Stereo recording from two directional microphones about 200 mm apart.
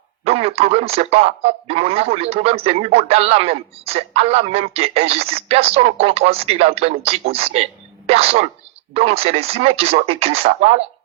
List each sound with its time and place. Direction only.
0.3 s a man's voice: 30° right (ahead or behind)